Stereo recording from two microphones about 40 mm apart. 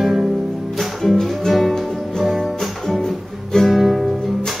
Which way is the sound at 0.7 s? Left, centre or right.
Centre.